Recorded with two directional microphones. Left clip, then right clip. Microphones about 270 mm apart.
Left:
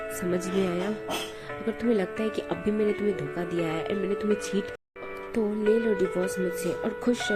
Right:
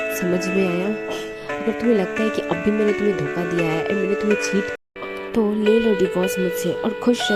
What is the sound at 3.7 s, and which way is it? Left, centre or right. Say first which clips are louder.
Speech: right 8 dB; right.